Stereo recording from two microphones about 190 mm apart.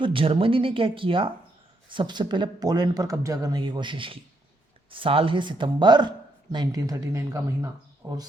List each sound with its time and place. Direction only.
0.0 s speech: 25° right (ahead or behind)